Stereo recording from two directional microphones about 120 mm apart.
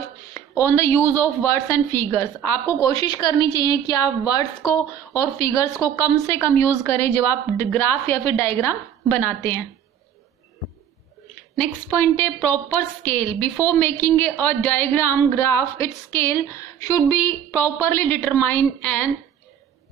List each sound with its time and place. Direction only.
0.3 s a woman's voice: 20° left (ahead or behind)
11.9 s a woman's voice: 15° left (ahead or behind)